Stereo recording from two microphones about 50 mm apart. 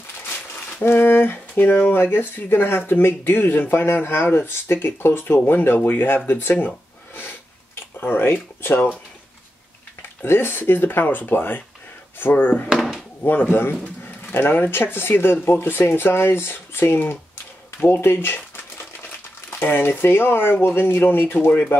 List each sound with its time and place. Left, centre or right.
0.3 s a sound: left
1.6 s speech: left
8.0 s speech: left
10.2 s speech: left
12.6 s drawer open or close: centre
13.2 s speech: left
19.6 s speech: left
21.5 s speech: left